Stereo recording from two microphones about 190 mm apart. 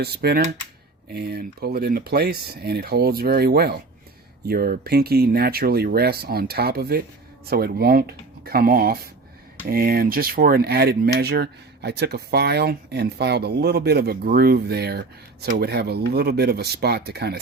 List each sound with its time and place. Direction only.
0.0 s speech: 60° right (ahead or behind)